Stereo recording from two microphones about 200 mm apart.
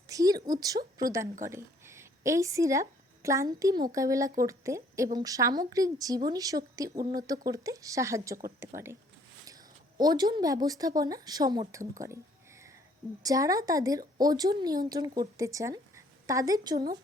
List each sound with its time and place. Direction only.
0.1 s a woman's voice: 15° right (ahead or behind)
11.7 s a sound: 15° right (ahead or behind)
13.2 s a woman's voice: 15° right (ahead or behind)